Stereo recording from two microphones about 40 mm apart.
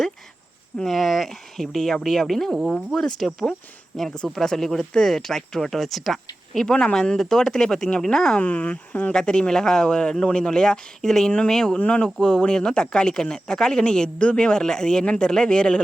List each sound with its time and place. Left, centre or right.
0.9 s speech: centre
6.7 s speech: left
7.2 s speech: centre
8.4 s speech: left
9.1 s speech: left